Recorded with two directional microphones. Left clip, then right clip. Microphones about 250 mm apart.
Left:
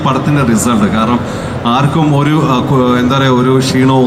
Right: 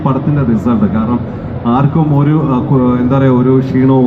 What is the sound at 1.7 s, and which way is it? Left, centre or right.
A man's voice, left.